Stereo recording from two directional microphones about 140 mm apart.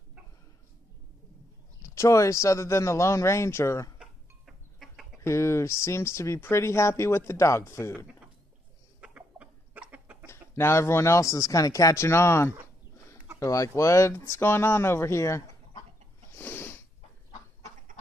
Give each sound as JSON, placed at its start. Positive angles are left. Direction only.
{"t": 1.8, "sound": "speech", "side_deg": 20}
{"t": 4.0, "sound": "a sound", "side_deg": 0}
{"t": 5.2, "sound": "speech", "side_deg": 20}
{"t": 9.0, "sound": "chicken", "side_deg": -10}
{"t": 10.2, "sound": "speech", "side_deg": 20}
{"t": 16.3, "sound": "a sound", "side_deg": 15}